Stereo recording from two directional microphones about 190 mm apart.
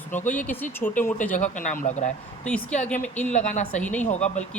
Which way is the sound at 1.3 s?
40° left (ahead or behind).